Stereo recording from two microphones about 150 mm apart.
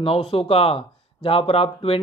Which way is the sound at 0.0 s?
40° left (ahead or behind).